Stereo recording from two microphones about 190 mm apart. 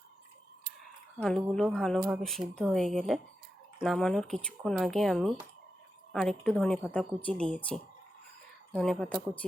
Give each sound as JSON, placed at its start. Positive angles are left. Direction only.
{"t": 1.2, "sound": "speech", "side_deg": 0}